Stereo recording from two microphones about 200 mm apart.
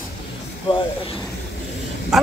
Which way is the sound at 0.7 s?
25° left (ahead or behind).